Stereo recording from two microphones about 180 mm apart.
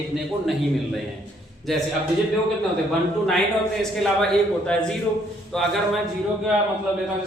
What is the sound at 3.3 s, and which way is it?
Speech, centre (ahead or behind).